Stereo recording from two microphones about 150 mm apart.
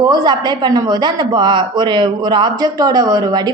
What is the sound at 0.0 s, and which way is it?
Speech, 30° right (ahead or behind).